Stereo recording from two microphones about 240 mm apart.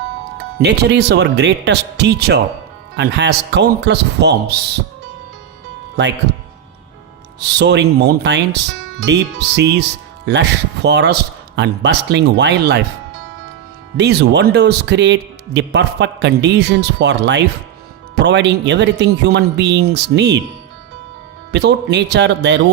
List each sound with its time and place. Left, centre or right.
0.6 s speech: right
6.0 s speech: right
7.3 s speech: right
13.9 s speech: right
21.5 s speech: right